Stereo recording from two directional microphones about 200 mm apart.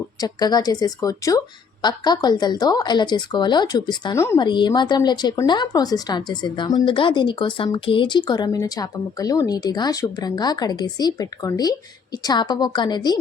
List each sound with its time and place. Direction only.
0.2 s a woman's voice: 20° left (ahead or behind)